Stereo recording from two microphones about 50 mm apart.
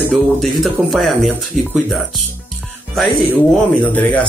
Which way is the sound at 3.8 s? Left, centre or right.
Left.